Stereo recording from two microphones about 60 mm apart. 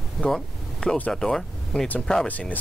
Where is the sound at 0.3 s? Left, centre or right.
Centre.